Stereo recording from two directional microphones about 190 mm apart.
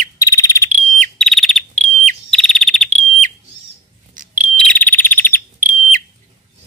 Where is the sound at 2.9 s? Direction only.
40° right (ahead or behind).